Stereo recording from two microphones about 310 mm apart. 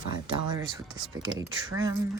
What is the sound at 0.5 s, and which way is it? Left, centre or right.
Speech, centre.